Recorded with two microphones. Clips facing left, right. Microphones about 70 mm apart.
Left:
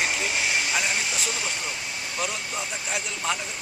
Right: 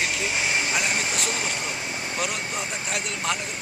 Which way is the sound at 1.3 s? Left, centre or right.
Right.